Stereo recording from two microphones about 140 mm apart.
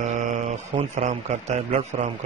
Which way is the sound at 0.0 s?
55° right (ahead or behind).